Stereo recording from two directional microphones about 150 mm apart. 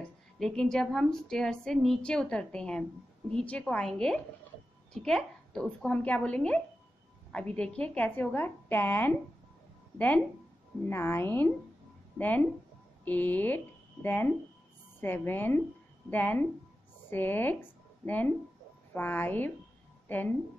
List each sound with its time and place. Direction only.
0.4 s a woman's voice: 5° left (ahead or behind)